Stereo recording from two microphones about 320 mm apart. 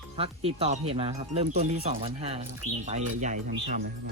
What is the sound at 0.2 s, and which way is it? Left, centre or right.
Speech, centre.